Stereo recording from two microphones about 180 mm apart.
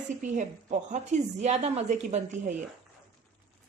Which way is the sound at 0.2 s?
45° right (ahead or behind).